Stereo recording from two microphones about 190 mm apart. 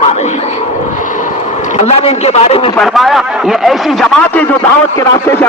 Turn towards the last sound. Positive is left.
turn(degrees=5)  # may be behind; listen again after turning